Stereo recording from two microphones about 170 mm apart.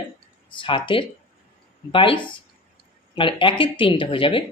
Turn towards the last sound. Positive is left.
turn(degrees=30)  # may be behind; listen again after turning